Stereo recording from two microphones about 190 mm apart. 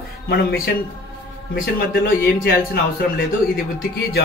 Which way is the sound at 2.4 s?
50° left (ahead or behind).